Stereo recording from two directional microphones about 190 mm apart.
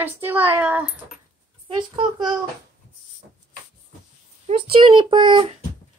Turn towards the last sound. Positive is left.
turn(degrees=-25)  # may be behind; listen again after turning